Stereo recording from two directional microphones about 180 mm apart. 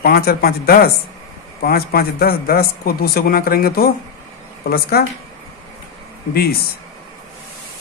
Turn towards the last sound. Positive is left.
turn(degrees=60)  # may be behind; listen again after turning